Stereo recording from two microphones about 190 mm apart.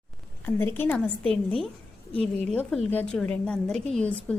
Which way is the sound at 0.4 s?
10° left (ahead or behind).